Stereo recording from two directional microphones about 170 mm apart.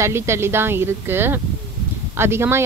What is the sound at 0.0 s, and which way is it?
Speech, 15° right (ahead or behind).